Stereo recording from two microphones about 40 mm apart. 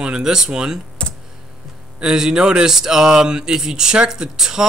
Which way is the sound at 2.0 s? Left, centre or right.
Centre.